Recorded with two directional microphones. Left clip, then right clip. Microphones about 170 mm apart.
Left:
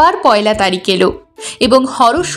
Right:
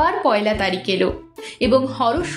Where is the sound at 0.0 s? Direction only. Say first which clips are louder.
Left 8 dB; 40° left (ahead or behind).